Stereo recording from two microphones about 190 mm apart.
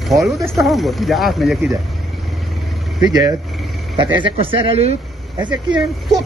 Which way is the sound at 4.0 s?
25° right (ahead or behind).